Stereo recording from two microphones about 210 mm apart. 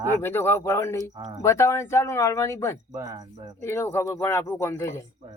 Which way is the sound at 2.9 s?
15° right (ahead or behind).